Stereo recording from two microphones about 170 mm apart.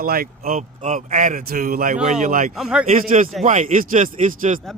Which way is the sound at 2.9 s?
50° right (ahead or behind).